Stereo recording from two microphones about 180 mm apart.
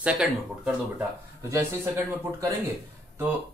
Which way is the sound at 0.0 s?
10° right (ahead or behind).